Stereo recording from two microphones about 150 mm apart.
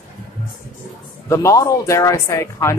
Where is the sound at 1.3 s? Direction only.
20° left (ahead or behind).